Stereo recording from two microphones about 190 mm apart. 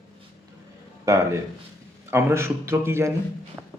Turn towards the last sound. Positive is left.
turn(degrees=-15)  # may be behind; listen again after turning